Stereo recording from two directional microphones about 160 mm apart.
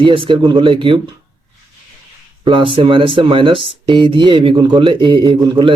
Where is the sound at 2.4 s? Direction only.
30° right (ahead or behind).